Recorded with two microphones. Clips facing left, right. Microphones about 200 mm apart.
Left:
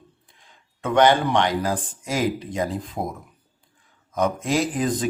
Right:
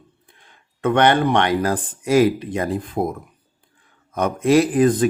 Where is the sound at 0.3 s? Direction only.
60° right (ahead or behind).